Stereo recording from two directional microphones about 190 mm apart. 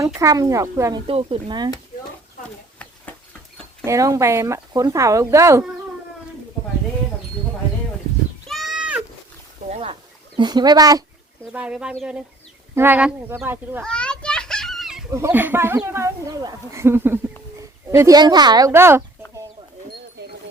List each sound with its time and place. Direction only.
0.0 s speech: 15° right (ahead or behind)
1.0 s speech: 30° right (ahead or behind)
3.8 s speech: 15° right (ahead or behind)
8.4 s goat: centre (ahead or behind)
9.6 s a sound: 30° right (ahead or behind)
11.5 s speech: 5° right (ahead or behind)
13.8 s children playing: 5° left (ahead or behind)
15.1 s speech: 10° right (ahead or behind)